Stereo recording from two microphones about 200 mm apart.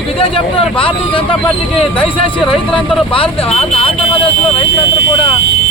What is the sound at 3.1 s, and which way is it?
Speech, 30° left (ahead or behind).